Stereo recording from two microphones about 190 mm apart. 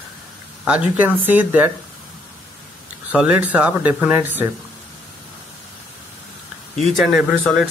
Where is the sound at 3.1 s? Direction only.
5° right (ahead or behind).